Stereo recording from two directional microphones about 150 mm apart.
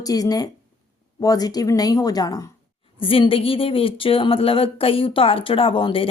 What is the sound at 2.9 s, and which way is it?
Speech, 35° left (ahead or behind).